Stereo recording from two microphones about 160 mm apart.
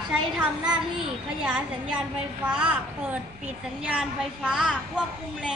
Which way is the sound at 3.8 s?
5° right (ahead or behind).